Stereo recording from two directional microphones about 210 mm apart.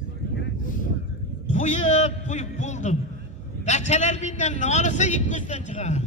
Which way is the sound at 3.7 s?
35° left (ahead or behind).